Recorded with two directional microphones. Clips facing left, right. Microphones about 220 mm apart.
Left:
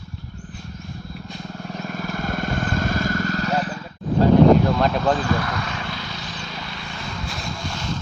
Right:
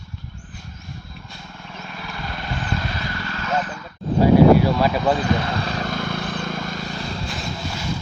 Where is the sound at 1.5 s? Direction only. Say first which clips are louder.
Left 7 dB; 40° left (ahead or behind).